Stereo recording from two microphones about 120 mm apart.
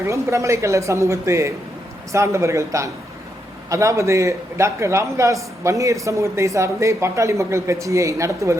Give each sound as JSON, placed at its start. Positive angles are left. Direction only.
{"t": 0.0, "sound": "a man's voice", "side_deg": -25}